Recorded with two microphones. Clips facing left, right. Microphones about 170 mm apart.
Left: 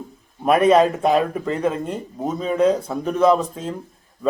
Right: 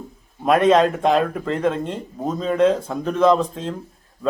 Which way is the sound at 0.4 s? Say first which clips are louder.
Left 1 dB; 5° left (ahead or behind).